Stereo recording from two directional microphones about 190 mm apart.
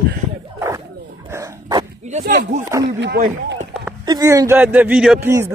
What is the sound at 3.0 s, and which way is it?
Speech, 60° right (ahead or behind).